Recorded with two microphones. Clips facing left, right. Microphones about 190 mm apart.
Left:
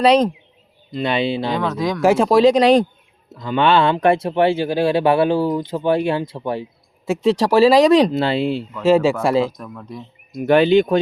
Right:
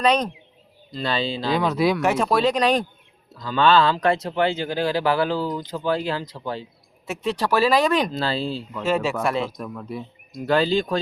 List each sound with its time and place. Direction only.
0.0 s speech: 30° left (ahead or behind)
1.5 s speech: 10° right (ahead or behind)
2.0 s speech: 30° left (ahead or behind)
8.4 s speech: 60° left (ahead or behind)
8.8 s speech: 30° left (ahead or behind)
9.6 s speech: 5° right (ahead or behind)
10.3 s speech: 20° left (ahead or behind)